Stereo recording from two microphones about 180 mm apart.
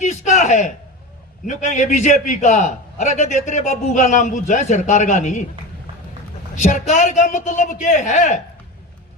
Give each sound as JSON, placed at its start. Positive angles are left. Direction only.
{"t": 0.0, "sound": "a sound", "side_deg": 40}
{"t": 1.5, "sound": "a man's voice", "side_deg": 40}
{"t": 6.6, "sound": "a man's voice", "side_deg": 45}